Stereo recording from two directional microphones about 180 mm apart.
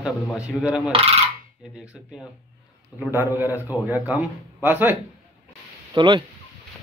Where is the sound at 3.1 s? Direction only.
10° right (ahead or behind).